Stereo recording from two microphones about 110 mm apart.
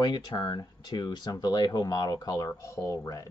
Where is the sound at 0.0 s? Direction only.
40° left (ahead or behind).